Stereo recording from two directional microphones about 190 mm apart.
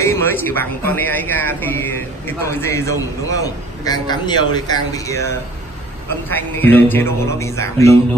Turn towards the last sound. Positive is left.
turn(degrees=15)  # may be behind; listen again after turning